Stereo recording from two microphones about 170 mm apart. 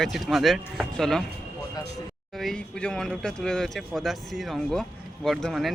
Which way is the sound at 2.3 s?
5° left (ahead or behind).